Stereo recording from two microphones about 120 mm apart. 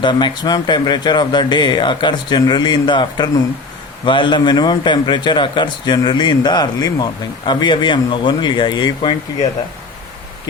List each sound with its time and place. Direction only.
0.0 s a man's voice: 40° left (ahead or behind)